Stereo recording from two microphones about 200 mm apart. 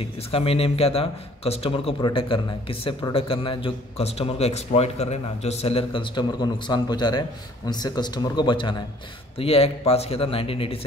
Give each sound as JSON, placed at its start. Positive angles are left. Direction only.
{"t": 0.3, "sound": "a man's voice", "side_deg": 30}